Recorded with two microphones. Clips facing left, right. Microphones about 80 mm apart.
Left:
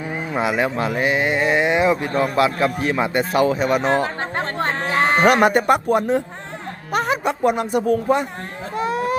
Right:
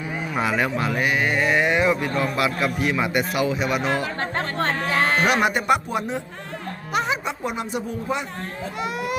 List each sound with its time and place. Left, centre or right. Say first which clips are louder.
0.3 s speech: left 3 dB; left
4.2 s music: left 1 dB; left
4.8 s a sound: left 4 dB; left
5.2 s speech: left 6 dB; left
8.8 s speech: left 6 dB; left